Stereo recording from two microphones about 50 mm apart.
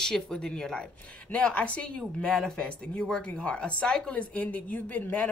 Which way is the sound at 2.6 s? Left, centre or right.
Left.